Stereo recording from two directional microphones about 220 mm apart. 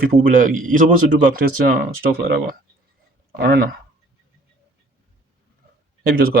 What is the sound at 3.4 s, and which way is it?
Speech, 45° right (ahead or behind).